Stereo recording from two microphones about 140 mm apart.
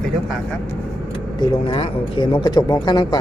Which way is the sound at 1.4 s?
40° left (ahead or behind).